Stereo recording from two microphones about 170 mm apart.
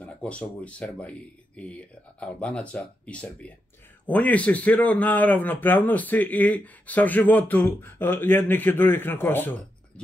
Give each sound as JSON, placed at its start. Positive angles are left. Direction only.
{"t": 0.0, "sound": "speech", "side_deg": 5}